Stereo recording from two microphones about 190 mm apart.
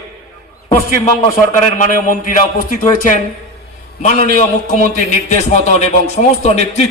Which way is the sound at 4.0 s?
40° left (ahead or behind).